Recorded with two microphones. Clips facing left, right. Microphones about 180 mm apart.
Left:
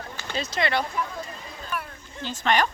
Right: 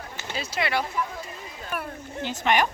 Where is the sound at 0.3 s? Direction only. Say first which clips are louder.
Left 2 dB; 10° right (ahead or behind).